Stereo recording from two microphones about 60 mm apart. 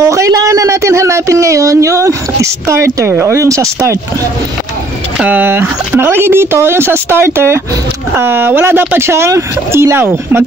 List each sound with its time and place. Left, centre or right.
0.0 s a sound: right
3.1 s speech: right
3.3 s speech: right
5.2 s speech: right
5.5 s speech: right